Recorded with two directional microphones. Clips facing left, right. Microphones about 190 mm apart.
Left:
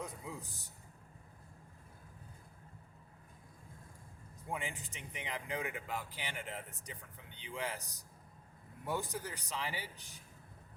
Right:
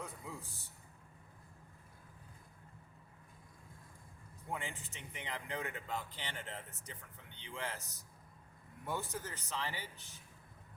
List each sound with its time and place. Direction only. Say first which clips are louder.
0.0 s a man's voice: left 2 dB; 15° left (ahead or behind)
4.5 s speech: left 1 dB; 15° left (ahead or behind)
8.9 s speech: left 2 dB; 15° left (ahead or behind)